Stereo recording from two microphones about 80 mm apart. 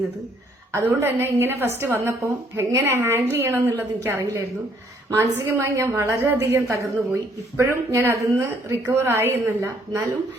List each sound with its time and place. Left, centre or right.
0.7 s a woman's voice: right